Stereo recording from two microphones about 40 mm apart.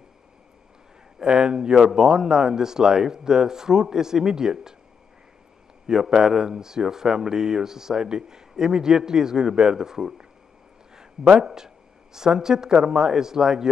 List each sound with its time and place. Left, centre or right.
1.2 s speech: centre
5.9 s speech: centre